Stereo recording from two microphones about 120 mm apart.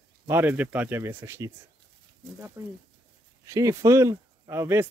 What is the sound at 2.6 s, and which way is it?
Speech, 25° right (ahead or behind).